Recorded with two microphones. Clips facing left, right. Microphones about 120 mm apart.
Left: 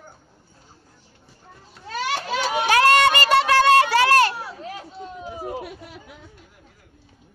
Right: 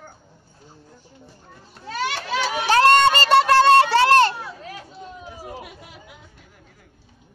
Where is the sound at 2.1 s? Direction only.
45° left (ahead or behind).